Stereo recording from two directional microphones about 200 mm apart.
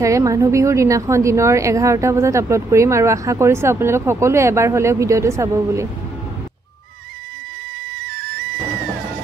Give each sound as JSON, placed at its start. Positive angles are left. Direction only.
{"t": 0.0, "sound": "a woman's voice", "side_deg": -15}
{"t": 8.0, "sound": "flute", "side_deg": -50}